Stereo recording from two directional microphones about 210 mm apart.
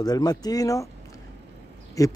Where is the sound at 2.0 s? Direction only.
15° left (ahead or behind).